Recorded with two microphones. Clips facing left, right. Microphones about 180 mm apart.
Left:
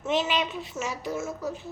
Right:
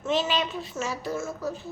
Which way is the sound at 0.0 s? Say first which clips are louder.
Even; 20° left (ahead or behind).